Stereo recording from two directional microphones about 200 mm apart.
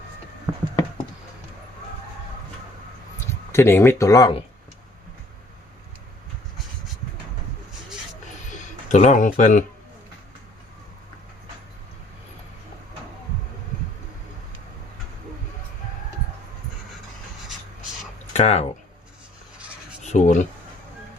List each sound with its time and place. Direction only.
0.5 s a sound: 20° right (ahead or behind)
3.5 s speech: 10° left (ahead or behind)
8.4 s speech: 40° left (ahead or behind)
18.3 s speech: 35° left (ahead or behind)
20.1 s speech: 40° left (ahead or behind)